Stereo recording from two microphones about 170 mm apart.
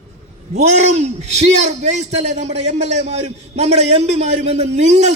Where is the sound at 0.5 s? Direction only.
40° right (ahead or behind).